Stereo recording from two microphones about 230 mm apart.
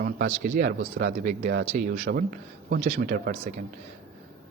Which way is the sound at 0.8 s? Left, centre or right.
Right.